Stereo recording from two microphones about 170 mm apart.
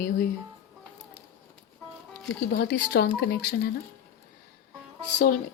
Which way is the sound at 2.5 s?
85° left.